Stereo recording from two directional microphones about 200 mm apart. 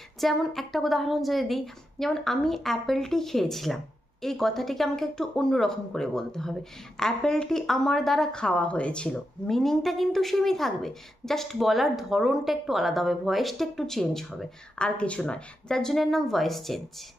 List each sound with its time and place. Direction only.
0.2 s a woman's voice: centre (ahead or behind)